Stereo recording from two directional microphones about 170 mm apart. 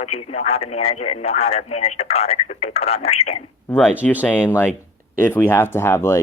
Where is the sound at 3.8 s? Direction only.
5° right (ahead or behind).